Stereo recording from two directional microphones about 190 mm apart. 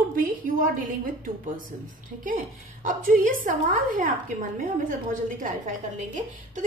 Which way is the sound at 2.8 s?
45° right (ahead or behind).